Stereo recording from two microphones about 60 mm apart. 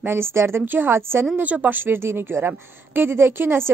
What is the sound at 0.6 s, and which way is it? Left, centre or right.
Speech, right.